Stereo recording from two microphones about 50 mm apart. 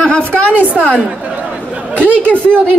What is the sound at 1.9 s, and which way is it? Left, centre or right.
Speech, left.